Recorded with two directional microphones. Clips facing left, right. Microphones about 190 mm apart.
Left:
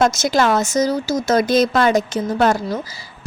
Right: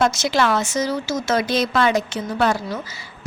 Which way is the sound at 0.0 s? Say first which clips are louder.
Left 3 dB; 45° left (ahead or behind).